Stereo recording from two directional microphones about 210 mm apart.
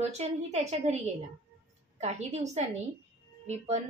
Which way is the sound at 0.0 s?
30° right (ahead or behind).